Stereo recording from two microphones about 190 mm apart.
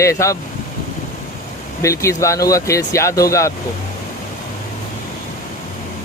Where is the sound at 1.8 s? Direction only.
15° left (ahead or behind).